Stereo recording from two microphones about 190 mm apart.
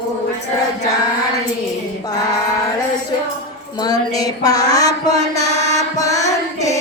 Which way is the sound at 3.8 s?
20° left (ahead or behind).